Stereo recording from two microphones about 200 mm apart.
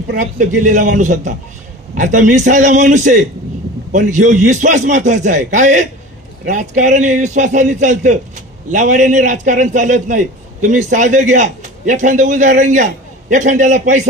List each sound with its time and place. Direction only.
0.1 s a man's voice: 40° right (ahead or behind)